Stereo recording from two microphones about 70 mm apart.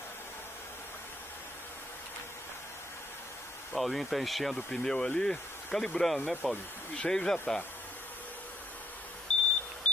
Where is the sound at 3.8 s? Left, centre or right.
Centre.